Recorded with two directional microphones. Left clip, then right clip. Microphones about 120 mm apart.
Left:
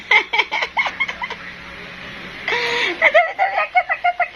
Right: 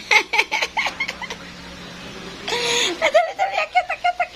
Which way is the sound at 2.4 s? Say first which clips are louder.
Left 2 dB; 15° right (ahead or behind).